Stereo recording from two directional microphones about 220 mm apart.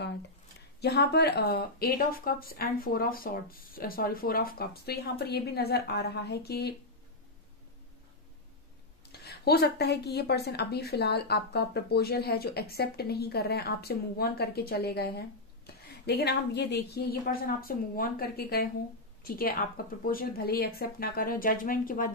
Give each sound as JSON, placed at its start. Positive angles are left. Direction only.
{"t": 0.7, "sound": "a woman's voice", "side_deg": 45}
{"t": 9.1, "sound": "a woman's voice", "side_deg": 45}